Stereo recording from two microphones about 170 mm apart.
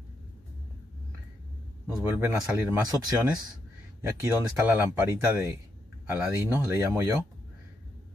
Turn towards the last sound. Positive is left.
turn(degrees=-15)  # may be behind; listen again after turning